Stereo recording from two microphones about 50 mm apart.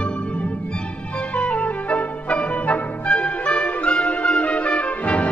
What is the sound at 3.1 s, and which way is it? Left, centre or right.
Music, left.